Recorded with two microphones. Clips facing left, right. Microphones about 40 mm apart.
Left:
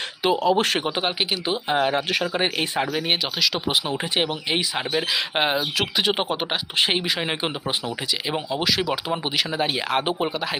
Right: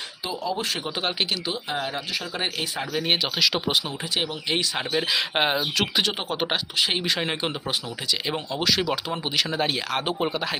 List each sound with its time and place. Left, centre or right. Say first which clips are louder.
0.3 s speech: left 8 dB; left
0.9 s speech: left 3 dB; left
1.7 s speech: left 10 dB; left
3.1 s speech: even; centre
3.8 s speech: left 4 dB; centre
6.1 s speech: left 6 dB; left
6.3 s speech: left 1 dB; centre
10.2 s speech: left 1 dB; centre